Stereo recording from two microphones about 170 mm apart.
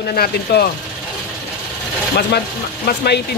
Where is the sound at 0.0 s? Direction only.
65° left (ahead or behind).